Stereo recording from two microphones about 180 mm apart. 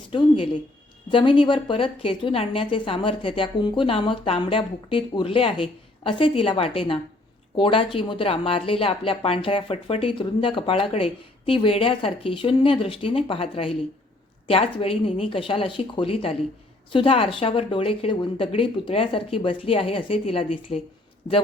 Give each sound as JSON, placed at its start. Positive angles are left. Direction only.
{"t": 0.1, "sound": "speech", "side_deg": 30}